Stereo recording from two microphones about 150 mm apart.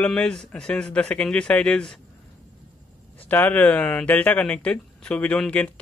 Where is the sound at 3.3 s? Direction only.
10° left (ahead or behind).